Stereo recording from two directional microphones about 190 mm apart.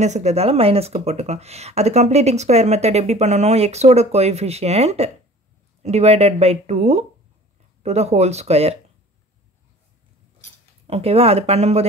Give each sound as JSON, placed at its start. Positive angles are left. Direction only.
{"t": 0.0, "sound": "speech", "side_deg": -35}
{"t": 10.9, "sound": "speech", "side_deg": -30}